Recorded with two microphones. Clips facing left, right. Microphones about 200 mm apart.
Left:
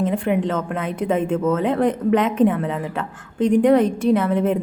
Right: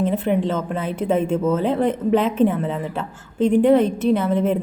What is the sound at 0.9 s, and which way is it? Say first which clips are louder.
Speech: right 1 dB; 25° right (ahead or behind).